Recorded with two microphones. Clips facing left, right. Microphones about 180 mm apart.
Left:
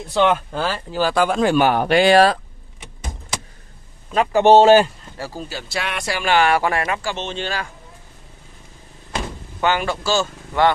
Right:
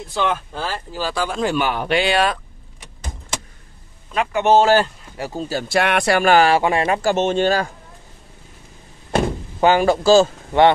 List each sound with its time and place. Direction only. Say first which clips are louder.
0.1 s speech: left 5 dB; 70° left (ahead or behind); by 2.3 s 40° left (ahead or behind)
4.1 s a man's voice: left 3 dB; 35° left (ahead or behind)
5.1 s speech: right 3 dB; 15° right (ahead or behind)
5.5 s speech: right 12 dB; 50° right (ahead or behind)
6.3 s speech: right 1 dB; 35° right (ahead or behind)
6.6 s speech: right 3 dB; 20° right (ahead or behind)
6.9 s speech: right 8 dB; 45° right (ahead or behind)
9.6 s speech: right 6 dB; 35° right (ahead or behind)